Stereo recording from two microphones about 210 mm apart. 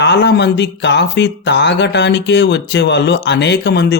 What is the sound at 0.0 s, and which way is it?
Speech, 55° left (ahead or behind).